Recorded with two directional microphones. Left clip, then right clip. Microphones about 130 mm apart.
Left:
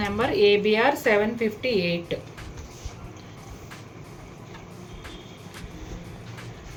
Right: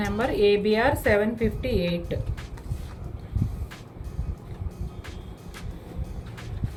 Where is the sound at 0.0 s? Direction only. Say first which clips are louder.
Left 2 dB; 15° right (ahead or behind).